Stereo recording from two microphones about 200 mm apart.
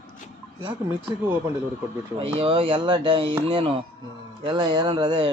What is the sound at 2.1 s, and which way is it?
Speech, 25° right (ahead or behind).